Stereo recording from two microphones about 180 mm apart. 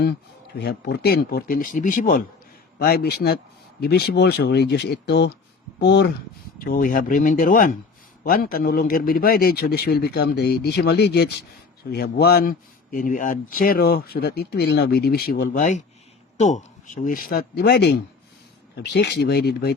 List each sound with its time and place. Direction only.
0.6 s speech: 65° left (ahead or behind); by 2.2 s 50° left (ahead or behind)
2.7 s speech: 60° left (ahead or behind)
6.7 s speech: 50° left (ahead or behind)